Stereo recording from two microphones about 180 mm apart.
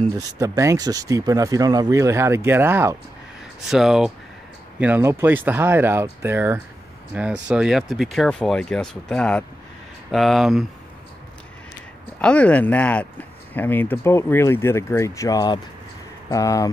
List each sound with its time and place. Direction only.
0.4 s speech: 15° right (ahead or behind)
3.6 s speech: centre (ahead or behind)
12.2 s speech: 5° left (ahead or behind)